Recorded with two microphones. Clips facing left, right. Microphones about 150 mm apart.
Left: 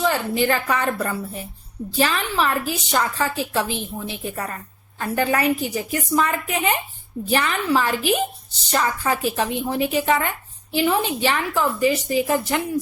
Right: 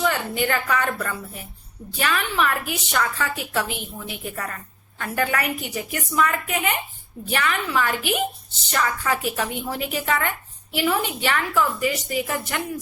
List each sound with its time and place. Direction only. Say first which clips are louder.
0.0 s a woman's voice: left 3 dB; 30° left (ahead or behind)